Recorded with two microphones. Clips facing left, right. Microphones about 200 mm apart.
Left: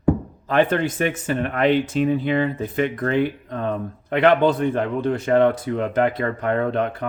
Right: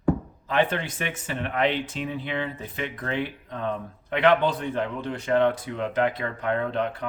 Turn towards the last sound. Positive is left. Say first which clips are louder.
# left 5 dB
turn(degrees=50)  # may be behind; listen again after turning